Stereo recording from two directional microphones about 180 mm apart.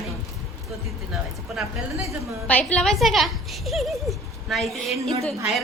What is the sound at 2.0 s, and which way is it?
A woman's voice, 10° left (ahead or behind).